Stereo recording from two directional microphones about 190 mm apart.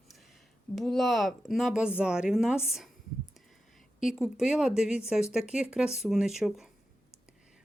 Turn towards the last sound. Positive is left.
turn(degrees=0)  # may be behind; listen again after turning